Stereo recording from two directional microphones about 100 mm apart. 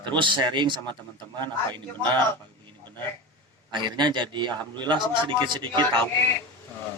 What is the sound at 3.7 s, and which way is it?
A man's voice, 50° right (ahead or behind).